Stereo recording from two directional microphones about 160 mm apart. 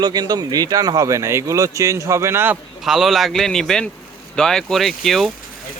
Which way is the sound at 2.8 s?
Centre (ahead or behind).